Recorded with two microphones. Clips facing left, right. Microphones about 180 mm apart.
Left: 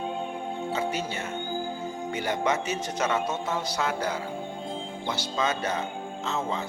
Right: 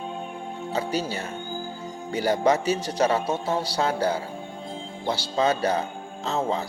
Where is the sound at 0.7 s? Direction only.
35° right (ahead or behind).